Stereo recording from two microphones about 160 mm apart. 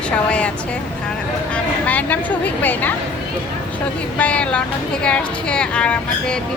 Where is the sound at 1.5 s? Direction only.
10° left (ahead or behind).